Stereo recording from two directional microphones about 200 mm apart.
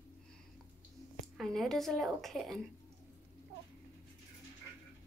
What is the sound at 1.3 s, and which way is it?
A woman's voice, centre (ahead or behind).